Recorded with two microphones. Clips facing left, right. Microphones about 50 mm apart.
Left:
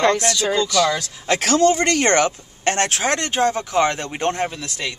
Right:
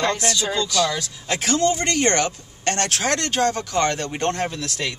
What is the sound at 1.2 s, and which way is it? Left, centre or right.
Speech, left.